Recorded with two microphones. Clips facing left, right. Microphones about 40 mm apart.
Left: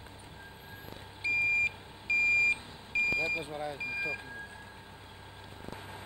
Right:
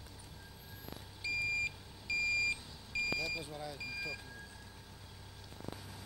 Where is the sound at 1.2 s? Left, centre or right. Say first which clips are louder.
Left 7 dB; left.